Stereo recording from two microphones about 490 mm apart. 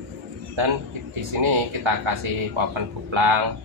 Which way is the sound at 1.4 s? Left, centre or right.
Right.